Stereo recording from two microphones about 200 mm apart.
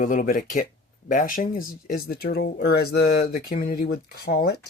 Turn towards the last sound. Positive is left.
turn(degrees=55)  # may be behind; listen again after turning